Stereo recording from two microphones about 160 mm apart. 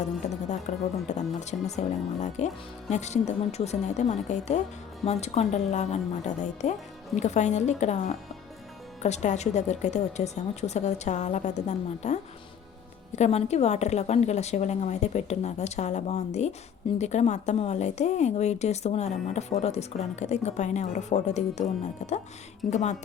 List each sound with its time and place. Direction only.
0.0 s a woman's voice: 45° left (ahead or behind)
22.7 s a woman's voice: 45° left (ahead or behind)